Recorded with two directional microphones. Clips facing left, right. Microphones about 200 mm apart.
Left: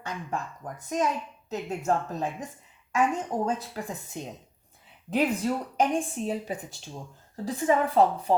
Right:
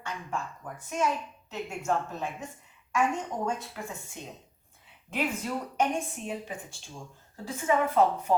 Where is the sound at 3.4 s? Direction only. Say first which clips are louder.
Left 3 dB; 35° left (ahead or behind).